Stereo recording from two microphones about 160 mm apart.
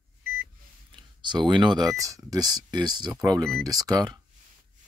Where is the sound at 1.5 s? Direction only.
30° right (ahead or behind).